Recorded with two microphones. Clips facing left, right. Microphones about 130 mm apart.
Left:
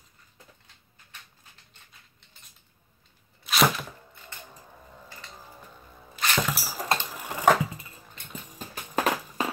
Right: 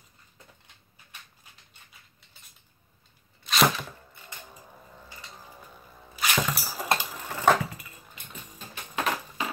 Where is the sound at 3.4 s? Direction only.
Centre (ahead or behind).